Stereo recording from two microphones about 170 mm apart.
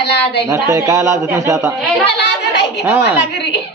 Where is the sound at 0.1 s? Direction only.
90° left.